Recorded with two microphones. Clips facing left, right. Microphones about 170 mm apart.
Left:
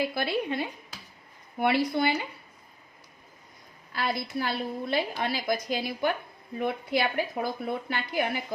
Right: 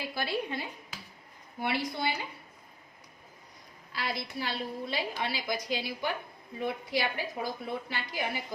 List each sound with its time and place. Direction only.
0.1 s speech: 60° left (ahead or behind)
3.9 s a woman's voice: 55° left (ahead or behind)